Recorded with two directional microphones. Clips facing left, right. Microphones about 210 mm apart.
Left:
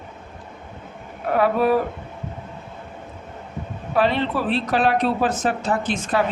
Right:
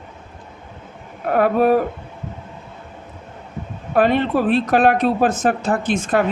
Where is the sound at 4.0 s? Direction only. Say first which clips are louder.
Right 4 dB; 50° right (ahead or behind).